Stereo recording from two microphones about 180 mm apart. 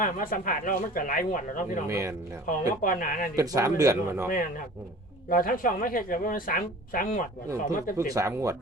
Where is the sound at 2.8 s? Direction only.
50° left (ahead or behind).